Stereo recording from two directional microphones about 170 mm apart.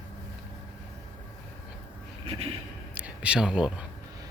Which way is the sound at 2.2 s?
35° right (ahead or behind).